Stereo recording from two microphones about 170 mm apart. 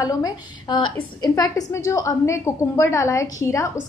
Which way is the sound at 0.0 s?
20° left (ahead or behind).